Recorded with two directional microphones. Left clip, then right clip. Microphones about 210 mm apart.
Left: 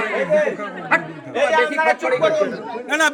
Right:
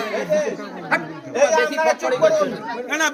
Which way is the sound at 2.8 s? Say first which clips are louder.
Left 4 dB; 65° left (ahead or behind).